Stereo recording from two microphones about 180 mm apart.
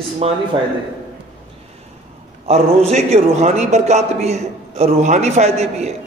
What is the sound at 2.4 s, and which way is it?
A man's voice, 35° right (ahead or behind).